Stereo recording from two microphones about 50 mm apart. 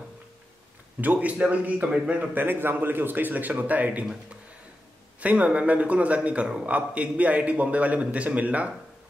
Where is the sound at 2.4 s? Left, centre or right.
Right.